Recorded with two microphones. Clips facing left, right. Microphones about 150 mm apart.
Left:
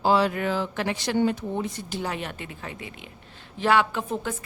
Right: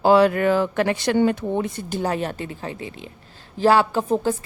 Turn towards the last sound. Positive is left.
turn(degrees=-35)  # may be behind; listen again after turning